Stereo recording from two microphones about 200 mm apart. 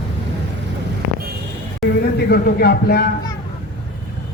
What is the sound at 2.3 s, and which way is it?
Speech, 50° left (ahead or behind).